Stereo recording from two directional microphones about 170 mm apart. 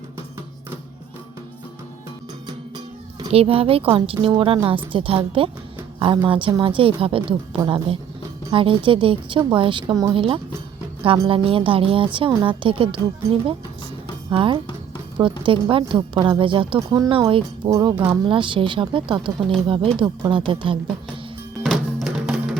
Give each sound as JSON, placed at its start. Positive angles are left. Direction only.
{"t": 2.5, "sound": "music", "side_deg": -25}
{"t": 3.2, "sound": "a woman's voice", "side_deg": -35}
{"t": 14.3, "sound": "a woman's voice", "side_deg": -30}
{"t": 21.6, "sound": "music", "side_deg": 0}